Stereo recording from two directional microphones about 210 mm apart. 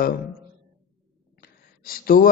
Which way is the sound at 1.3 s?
45° left (ahead or behind).